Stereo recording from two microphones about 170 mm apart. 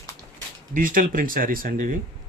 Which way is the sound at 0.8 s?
55° right (ahead or behind).